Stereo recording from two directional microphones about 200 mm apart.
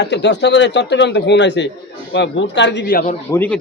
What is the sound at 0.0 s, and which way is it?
Speech, 60° left (ahead or behind).